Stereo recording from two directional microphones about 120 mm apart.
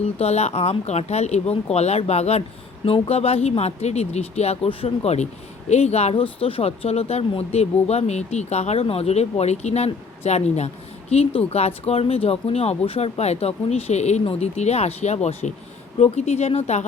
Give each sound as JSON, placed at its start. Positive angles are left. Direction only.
{"t": 0.2, "sound": "speech", "side_deg": 65}